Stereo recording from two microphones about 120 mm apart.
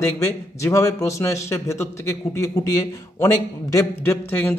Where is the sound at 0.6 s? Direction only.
25° left (ahead or behind).